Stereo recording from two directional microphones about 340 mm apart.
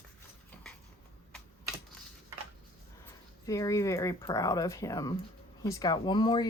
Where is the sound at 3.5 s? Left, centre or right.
Centre.